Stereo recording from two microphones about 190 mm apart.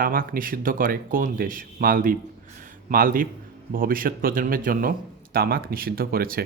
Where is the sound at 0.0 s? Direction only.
50° right (ahead or behind).